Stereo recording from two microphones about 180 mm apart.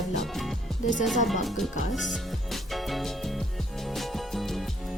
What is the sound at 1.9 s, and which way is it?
Music, centre (ahead or behind).